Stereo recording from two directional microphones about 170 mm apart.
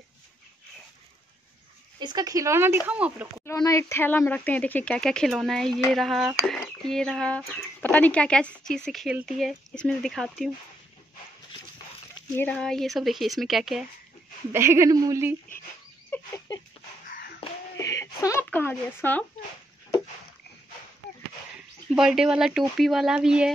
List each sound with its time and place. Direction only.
2.0 s speech: 25° right (ahead or behind); by 3.4 s 10° right (ahead or behind)
3.4 s speech: 20° left (ahead or behind); by 10.5 s centre (ahead or behind)
12.4 s speech: 10° left (ahead or behind)
14.5 s speech: 15° right (ahead or behind)
16.1 s a sound: 20° left (ahead or behind)
17.1 s a sound: 60° left (ahead or behind)
17.7 s speech: 20° left (ahead or behind)
21.9 s speech: 5° right (ahead or behind)